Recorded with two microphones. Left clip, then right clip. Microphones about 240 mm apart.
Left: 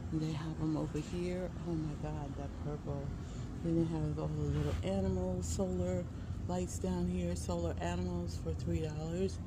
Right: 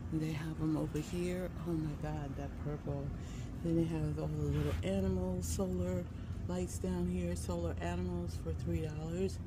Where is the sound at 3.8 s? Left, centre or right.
Centre.